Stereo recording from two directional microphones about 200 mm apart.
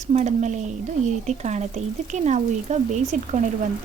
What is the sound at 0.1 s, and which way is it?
Speech, 35° right (ahead or behind).